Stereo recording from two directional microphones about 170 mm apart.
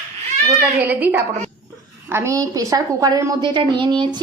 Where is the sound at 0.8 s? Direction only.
10° right (ahead or behind).